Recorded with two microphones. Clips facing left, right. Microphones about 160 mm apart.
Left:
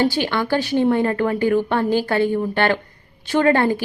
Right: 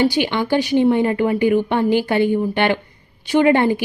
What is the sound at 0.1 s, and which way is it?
Speech, 15° right (ahead or behind).